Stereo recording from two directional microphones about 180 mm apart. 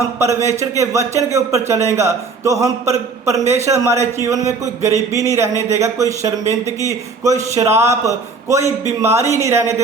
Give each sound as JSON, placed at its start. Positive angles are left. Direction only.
{"t": 0.2, "sound": "a man's voice", "side_deg": -15}